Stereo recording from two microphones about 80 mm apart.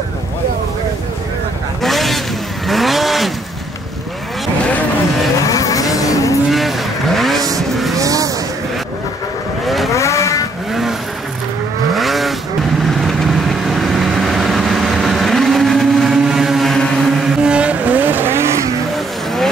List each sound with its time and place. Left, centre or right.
1.8 s vehicle: centre
5.4 s vehicle: left
6.5 s vehicle: centre
8.0 s vehicle: right
9.7 s vehicle: centre
9.9 s vehicle: left
10.7 s vehicle: centre
17.5 s vehicle: centre